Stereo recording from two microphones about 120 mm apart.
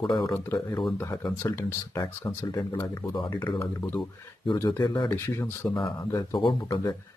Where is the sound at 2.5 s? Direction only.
30° left (ahead or behind).